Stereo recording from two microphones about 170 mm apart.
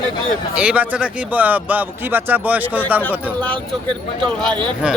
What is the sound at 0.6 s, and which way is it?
Speech, 10° right (ahead or behind).